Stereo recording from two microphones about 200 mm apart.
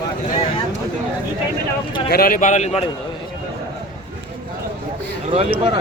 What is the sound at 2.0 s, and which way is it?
Speech, 50° left (ahead or behind).